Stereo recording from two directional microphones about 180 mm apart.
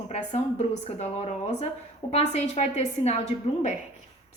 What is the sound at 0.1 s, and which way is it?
A woman's voice, 35° left (ahead or behind).